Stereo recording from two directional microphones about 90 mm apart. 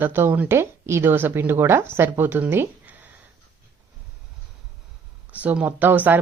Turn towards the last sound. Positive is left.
turn(degrees=-20)  # may be behind; listen again after turning